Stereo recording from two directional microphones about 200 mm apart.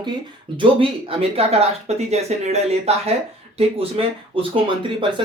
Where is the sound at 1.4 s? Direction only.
30° right (ahead or behind).